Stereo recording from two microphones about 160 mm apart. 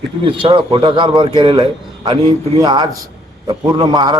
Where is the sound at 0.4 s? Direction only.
35° right (ahead or behind).